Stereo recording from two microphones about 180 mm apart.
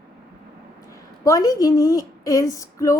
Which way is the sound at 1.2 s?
20° left (ahead or behind).